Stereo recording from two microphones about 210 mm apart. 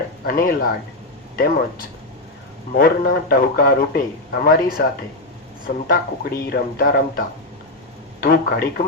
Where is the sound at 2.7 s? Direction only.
45° left (ahead or behind).